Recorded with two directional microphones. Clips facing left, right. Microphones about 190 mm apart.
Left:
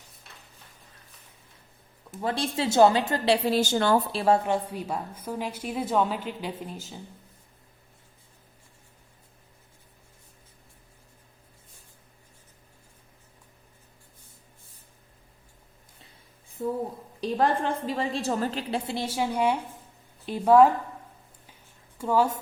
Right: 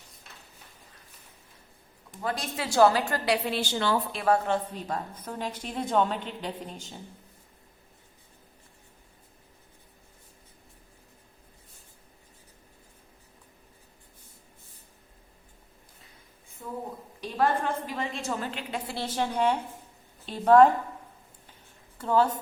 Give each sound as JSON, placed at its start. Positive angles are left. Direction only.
{"t": 2.2, "sound": "a woman's voice", "side_deg": 30}
{"t": 4.1, "sound": "a woman's voice", "side_deg": 30}
{"t": 4.4, "sound": "a woman's voice", "side_deg": 10}
{"t": 16.6, "sound": "a woman's voice", "side_deg": 30}
{"t": 19.0, "sound": "a woman's voice", "side_deg": 10}
{"t": 21.9, "sound": "a woman's voice", "side_deg": 10}